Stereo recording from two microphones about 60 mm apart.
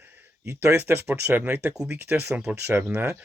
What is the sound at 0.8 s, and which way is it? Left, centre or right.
Speech, right.